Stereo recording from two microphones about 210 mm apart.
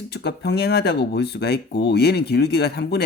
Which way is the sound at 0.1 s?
50° left (ahead or behind).